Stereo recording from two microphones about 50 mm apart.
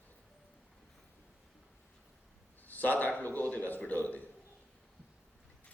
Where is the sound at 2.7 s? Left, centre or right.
Left.